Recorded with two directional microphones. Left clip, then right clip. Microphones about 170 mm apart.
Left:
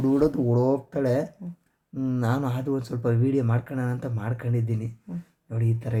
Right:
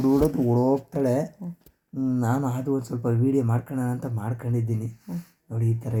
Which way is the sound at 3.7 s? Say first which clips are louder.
Right 1 dB; 25° left (ahead or behind).